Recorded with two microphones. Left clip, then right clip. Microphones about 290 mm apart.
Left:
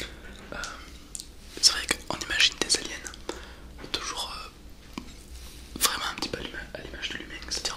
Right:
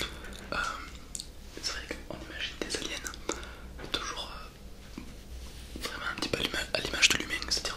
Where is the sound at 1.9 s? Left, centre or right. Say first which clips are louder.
Left 12 dB; left.